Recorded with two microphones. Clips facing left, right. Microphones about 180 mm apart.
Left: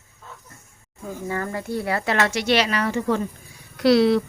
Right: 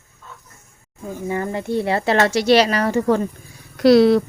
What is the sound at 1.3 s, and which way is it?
A woman's voice, 20° right (ahead or behind).